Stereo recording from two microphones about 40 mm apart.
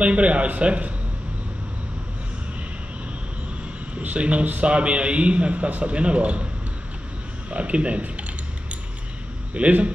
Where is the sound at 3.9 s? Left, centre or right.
Right.